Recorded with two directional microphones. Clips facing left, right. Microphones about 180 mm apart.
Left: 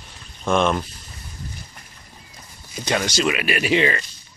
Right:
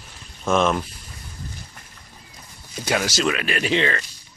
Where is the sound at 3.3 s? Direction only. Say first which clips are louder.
Left 3 dB; 10° left (ahead or behind).